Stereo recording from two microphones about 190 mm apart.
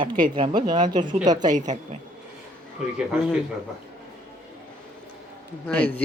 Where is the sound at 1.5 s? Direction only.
40° right (ahead or behind).